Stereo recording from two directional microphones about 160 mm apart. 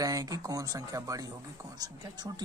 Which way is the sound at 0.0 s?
20° right (ahead or behind).